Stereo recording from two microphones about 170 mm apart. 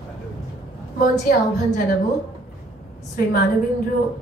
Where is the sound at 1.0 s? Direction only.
60° left (ahead or behind).